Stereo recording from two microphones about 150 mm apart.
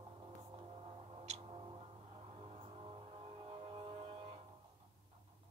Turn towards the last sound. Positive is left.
turn(degrees=-40)  # may be behind; listen again after turning